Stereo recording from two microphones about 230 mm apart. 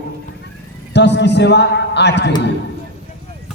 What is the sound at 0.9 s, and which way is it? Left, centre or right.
A man's voice, left.